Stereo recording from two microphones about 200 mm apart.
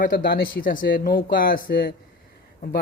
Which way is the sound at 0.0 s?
45° left (ahead or behind).